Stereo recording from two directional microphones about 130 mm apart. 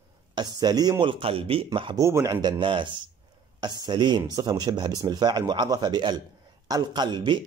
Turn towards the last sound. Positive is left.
turn(degrees=-35)  # may be behind; listen again after turning